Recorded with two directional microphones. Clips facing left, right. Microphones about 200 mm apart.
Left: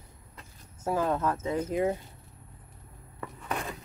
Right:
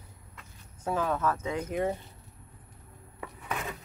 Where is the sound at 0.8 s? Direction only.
15° left (ahead or behind).